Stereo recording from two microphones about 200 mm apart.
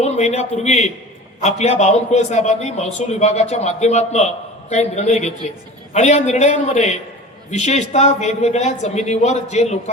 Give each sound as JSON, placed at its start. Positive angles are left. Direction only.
{"t": 0.0, "sound": "a man's voice", "side_deg": 35}